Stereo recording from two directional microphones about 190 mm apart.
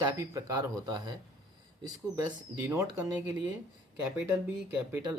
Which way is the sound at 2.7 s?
15° right (ahead or behind).